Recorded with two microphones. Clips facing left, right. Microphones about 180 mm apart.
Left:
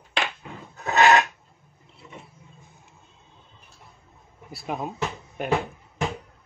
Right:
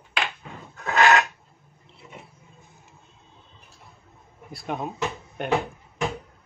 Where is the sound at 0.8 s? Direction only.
20° left (ahead or behind).